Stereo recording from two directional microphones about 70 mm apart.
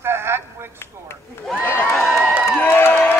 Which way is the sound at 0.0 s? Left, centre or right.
Right.